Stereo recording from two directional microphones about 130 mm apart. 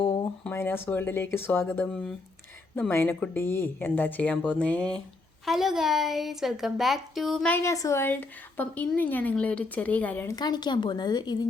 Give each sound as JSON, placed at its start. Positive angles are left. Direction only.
{"t": 0.0, "sound": "a sound", "side_deg": 35}
{"t": 0.5, "sound": "speech", "side_deg": 15}
{"t": 5.5, "sound": "a woman's voice", "side_deg": -5}
{"t": 7.5, "sound": "speech", "side_deg": 20}
{"t": 10.2, "sound": "a woman's voice", "side_deg": 30}